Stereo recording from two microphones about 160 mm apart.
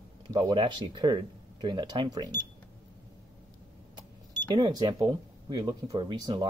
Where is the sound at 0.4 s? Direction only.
30° right (ahead or behind).